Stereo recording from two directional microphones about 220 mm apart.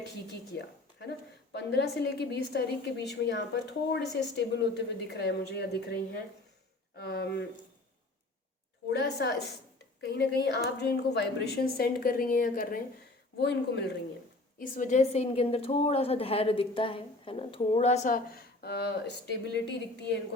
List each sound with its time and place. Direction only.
0.5 s a woman's voice: 50° left (ahead or behind)
8.9 s a woman's voice: 50° left (ahead or behind)
13.4 s a woman's voice: 50° left (ahead or behind)
14.6 s a woman's voice: 35° left (ahead or behind); by 20.1 s 50° left (ahead or behind)